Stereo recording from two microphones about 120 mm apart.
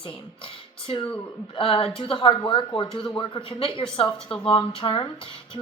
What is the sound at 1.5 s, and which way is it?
A woman's voice, 50° left (ahead or behind).